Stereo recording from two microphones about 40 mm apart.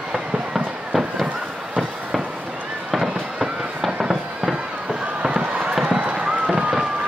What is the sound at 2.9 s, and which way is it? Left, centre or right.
Fireworks, centre.